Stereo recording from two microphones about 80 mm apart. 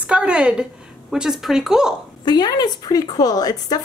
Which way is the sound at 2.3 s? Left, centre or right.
Left.